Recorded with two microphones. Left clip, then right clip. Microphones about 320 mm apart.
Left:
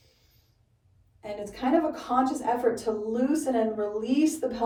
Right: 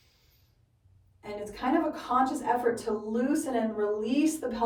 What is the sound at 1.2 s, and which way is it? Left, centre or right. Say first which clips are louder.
A woman's voice: left 2 dB; centre.